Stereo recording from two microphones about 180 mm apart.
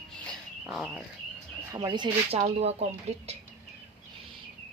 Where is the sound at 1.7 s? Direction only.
25° right (ahead or behind).